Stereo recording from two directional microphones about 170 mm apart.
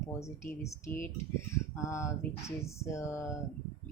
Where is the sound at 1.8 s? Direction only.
15° left (ahead or behind).